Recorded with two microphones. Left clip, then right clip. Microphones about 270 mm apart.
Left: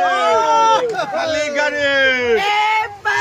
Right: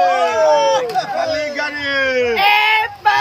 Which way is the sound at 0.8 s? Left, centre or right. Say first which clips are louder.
Right 1 dB; centre.